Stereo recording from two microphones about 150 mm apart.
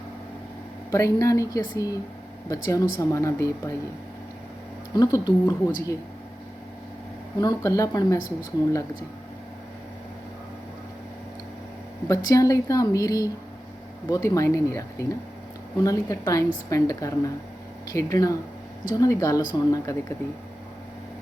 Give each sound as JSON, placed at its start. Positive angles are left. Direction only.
{"t": 0.9, "sound": "speech", "side_deg": 20}
{"t": 4.9, "sound": "speech", "side_deg": 25}
{"t": 7.3, "sound": "speech", "side_deg": 25}
{"t": 12.0, "sound": "speech", "side_deg": 20}